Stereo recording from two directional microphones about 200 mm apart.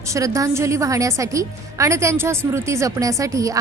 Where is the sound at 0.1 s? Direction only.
15° right (ahead or behind).